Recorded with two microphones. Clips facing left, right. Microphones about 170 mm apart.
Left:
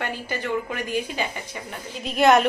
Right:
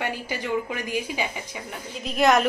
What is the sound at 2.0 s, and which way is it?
Speech, centre (ahead or behind).